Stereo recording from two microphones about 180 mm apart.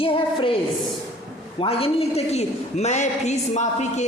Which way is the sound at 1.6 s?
35° left (ahead or behind).